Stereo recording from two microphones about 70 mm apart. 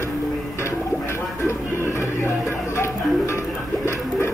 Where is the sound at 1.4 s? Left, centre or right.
Left.